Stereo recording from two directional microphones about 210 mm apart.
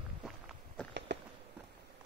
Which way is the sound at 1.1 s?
55° right (ahead or behind).